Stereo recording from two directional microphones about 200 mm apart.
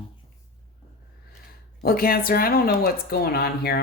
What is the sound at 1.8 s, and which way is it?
Speech, 45° left (ahead or behind).